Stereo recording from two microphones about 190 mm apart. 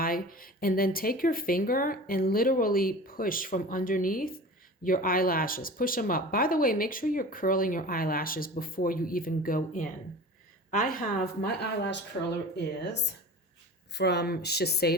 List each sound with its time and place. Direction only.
0.0 s speech: 50° left (ahead or behind)